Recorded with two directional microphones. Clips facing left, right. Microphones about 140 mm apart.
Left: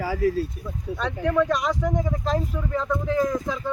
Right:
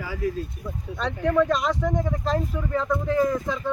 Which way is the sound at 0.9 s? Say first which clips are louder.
Right 1 dB; 5° left (ahead or behind).